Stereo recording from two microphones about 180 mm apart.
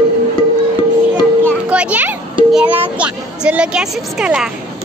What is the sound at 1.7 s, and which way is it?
Children playing, 10° right (ahead or behind).